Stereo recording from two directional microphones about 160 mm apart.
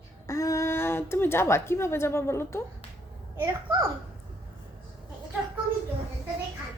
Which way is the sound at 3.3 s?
15° right (ahead or behind).